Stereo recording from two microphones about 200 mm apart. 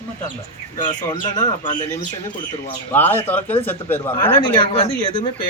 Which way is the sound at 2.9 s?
10° left (ahead or behind).